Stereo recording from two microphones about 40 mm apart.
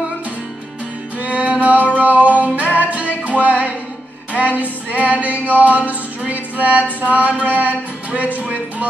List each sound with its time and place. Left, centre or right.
1.2 s music: right
8.1 s speech: right